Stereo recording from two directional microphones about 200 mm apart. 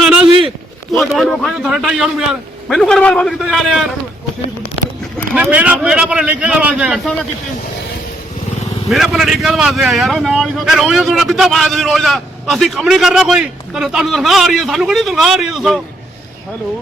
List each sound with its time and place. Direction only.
0.0 s a sound: 5° right (ahead or behind)
0.9 s speech: centre (ahead or behind)
5.3 s speech: 5° right (ahead or behind)
8.9 s speech: centre (ahead or behind)